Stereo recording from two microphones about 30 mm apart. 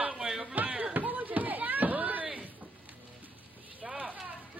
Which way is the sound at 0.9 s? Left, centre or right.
Right.